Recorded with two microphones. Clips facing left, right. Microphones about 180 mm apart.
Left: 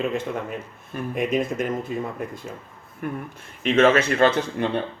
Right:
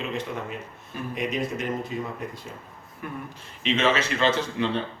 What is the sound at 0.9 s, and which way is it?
Speech, 55° left (ahead or behind).